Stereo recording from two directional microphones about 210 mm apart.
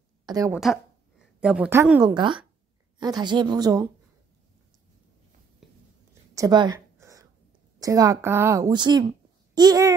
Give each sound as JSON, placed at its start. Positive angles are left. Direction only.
{"t": 0.3, "sound": "a woman's voice", "side_deg": -15}
{"t": 1.4, "sound": "a woman's voice", "side_deg": -5}
{"t": 2.0, "sound": "a woman's voice", "side_deg": -20}
{"t": 6.3, "sound": "a sound", "side_deg": -20}
{"t": 7.8, "sound": "a woman's voice", "side_deg": -15}